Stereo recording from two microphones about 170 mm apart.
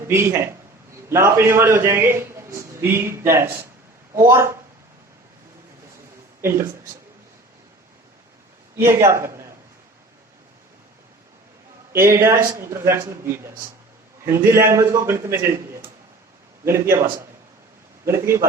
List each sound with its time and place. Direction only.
0.1 s a man's voice: 15° right (ahead or behind)
6.4 s speech: 15° right (ahead or behind)
8.7 s a man's voice: 15° right (ahead or behind)
12.0 s a man's voice: 15° right (ahead or behind)
16.6 s a man's voice: 15° right (ahead or behind)